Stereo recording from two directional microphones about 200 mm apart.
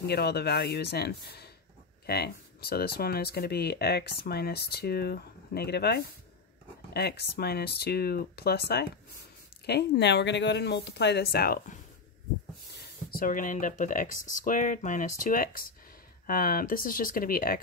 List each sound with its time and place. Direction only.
0.0 s speech: 55° left (ahead or behind)